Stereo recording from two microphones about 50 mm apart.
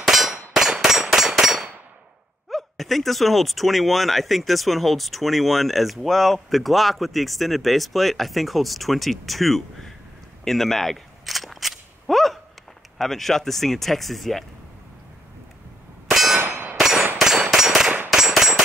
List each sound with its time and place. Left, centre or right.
0.0 s clang: centre
1.0 s a sound: centre
2.5 s speech: centre
10.4 s cap gun: centre
12.9 s speech: centre
16.1 s clang: centre
16.3 s clang: right
16.7 s clang: centre